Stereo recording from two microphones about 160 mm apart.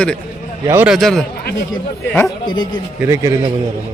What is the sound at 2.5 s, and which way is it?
Speech, 25° left (ahead or behind).